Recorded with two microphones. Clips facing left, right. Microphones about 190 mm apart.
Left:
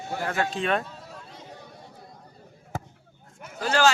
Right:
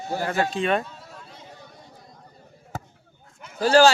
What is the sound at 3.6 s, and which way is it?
Speech, 35° right (ahead or behind).